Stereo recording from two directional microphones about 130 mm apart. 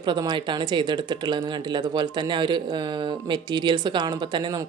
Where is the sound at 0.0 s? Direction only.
35° right (ahead or behind).